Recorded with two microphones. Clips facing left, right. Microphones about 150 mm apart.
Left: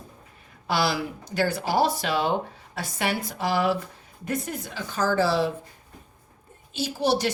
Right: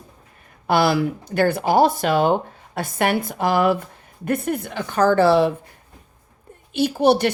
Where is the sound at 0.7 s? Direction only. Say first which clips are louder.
Right 7 dB; 55° right (ahead or behind).